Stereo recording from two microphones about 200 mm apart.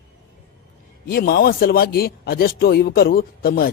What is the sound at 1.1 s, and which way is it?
Speech, 50° left (ahead or behind).